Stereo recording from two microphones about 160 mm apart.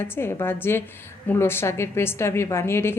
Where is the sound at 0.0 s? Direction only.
15° left (ahead or behind).